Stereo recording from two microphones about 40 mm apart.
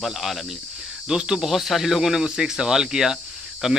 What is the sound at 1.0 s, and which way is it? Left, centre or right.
Speech, centre.